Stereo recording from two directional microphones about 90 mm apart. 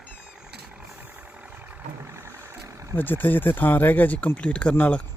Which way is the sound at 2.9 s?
20° left (ahead or behind).